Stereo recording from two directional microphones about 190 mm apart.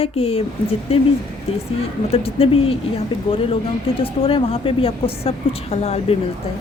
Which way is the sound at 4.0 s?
30° left (ahead or behind).